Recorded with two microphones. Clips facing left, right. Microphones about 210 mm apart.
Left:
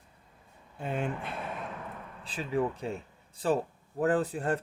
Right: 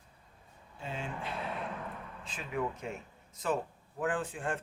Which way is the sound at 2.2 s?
35° left (ahead or behind).